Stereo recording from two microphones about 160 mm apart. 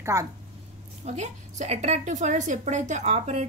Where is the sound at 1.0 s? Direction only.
45° right (ahead or behind).